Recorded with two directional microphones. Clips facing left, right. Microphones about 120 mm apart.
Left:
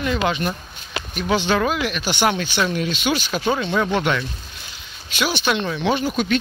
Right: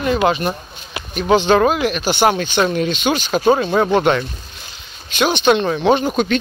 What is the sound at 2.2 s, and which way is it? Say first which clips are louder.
Speech: right 4 dB; 40° right (ahead or behind).